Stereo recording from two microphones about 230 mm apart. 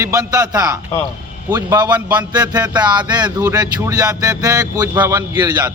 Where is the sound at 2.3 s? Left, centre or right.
Centre.